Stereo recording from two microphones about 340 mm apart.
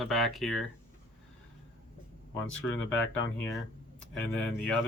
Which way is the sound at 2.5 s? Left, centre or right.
Centre.